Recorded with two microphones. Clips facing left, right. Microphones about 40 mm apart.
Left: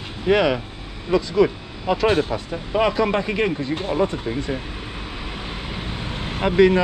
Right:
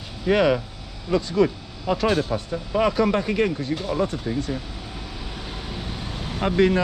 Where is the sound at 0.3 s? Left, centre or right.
Left.